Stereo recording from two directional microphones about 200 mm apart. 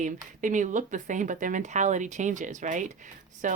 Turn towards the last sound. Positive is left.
turn(degrees=-40)  # may be behind; listen again after turning